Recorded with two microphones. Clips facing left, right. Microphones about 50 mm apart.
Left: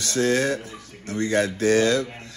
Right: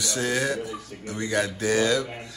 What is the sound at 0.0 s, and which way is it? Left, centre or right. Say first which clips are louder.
Speech: left 4 dB; centre.